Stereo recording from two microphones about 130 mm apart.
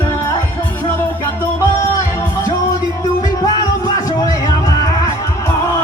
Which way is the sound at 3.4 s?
25° left (ahead or behind).